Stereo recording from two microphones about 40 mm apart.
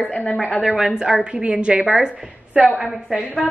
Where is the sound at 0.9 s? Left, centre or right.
Right.